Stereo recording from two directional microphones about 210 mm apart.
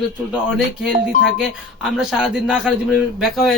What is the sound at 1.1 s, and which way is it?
Speech, 35° left (ahead or behind).